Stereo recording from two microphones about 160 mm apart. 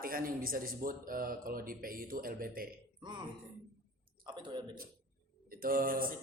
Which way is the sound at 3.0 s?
30° right (ahead or behind).